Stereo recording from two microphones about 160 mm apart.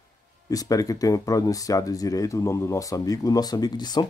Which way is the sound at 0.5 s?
20° left (ahead or behind).